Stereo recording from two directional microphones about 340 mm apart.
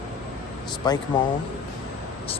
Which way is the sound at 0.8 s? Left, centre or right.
Centre.